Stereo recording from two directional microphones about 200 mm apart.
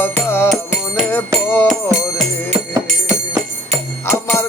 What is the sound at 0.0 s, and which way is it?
Music, 10° left (ahead or behind).